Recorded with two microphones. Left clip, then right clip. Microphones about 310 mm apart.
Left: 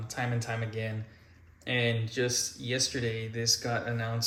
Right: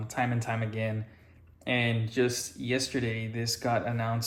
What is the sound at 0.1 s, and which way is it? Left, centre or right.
Speech, centre.